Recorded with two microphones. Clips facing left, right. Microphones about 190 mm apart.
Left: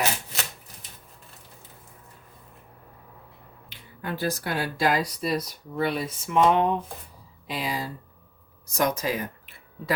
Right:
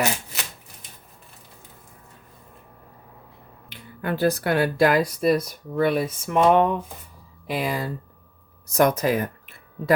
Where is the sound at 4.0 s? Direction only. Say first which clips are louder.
Right 7 dB; 60° right (ahead or behind).